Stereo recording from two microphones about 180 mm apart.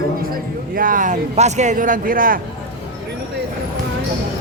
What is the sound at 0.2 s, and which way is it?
A man's voice, 55° right (ahead or behind).